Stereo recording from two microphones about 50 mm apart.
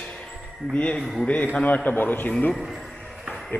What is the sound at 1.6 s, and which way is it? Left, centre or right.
Speech, left.